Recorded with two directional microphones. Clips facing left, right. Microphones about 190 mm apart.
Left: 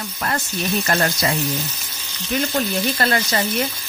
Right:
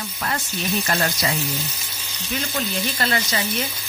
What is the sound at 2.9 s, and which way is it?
Speech, 55° left (ahead or behind).